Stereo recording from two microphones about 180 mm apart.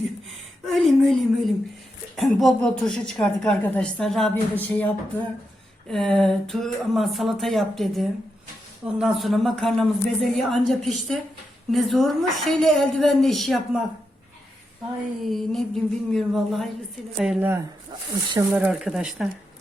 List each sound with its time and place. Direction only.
0.6 s a woman's voice: centre (ahead or behind)
15.2 s a woman's voice: centre (ahead or behind)